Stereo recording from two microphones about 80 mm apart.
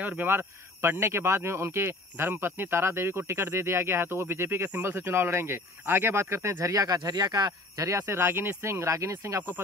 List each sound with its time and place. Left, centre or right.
0.0 s speech: right